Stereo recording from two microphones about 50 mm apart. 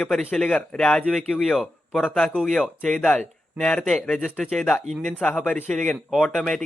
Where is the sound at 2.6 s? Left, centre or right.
Centre.